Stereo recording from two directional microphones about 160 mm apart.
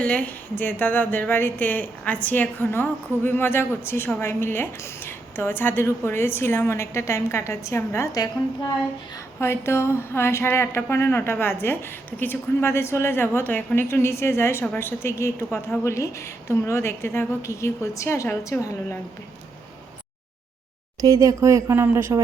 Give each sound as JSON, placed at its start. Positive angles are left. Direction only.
{"t": 0.0, "sound": "speech", "side_deg": 10}
{"t": 9.4, "sound": "speech", "side_deg": 15}
{"t": 21.2, "sound": "speech", "side_deg": -20}